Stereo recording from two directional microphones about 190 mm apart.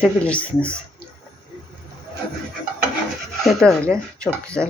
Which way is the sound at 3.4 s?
5° left (ahead or behind).